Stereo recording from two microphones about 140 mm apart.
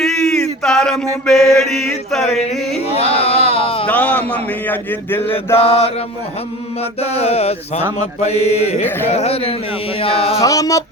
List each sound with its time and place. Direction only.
0.0 s a sound: 5° left (ahead or behind)
1.3 s mantra: centre (ahead or behind)
2.9 s speech: 45° left (ahead or behind)
3.8 s a man's voice: 10° left (ahead or behind)
5.5 s mantra: 45° left (ahead or behind)
7.0 s mantra: 50° left (ahead or behind)
10.0 s chant: 40° left (ahead or behind)
10.4 s music: 25° left (ahead or behind)